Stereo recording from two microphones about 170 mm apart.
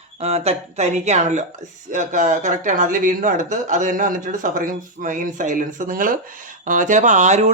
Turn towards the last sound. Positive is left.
turn(degrees=-45)  # may be behind; listen again after turning